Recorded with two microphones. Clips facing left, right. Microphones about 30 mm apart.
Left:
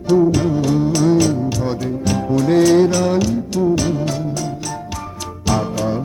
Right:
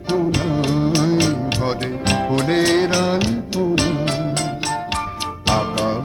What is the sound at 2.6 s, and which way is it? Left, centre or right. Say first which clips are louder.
Music: left 5 dB; right.